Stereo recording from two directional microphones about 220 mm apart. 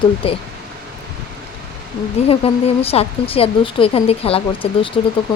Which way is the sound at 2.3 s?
25° left (ahead or behind).